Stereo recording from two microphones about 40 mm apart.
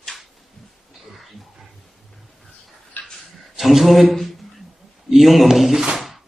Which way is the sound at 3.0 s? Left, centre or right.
Left.